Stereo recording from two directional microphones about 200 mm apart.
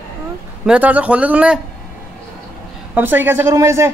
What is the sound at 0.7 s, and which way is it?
Speech, 5° right (ahead or behind).